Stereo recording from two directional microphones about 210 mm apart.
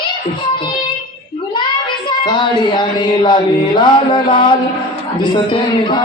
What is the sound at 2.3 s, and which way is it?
Speech, 20° left (ahead or behind).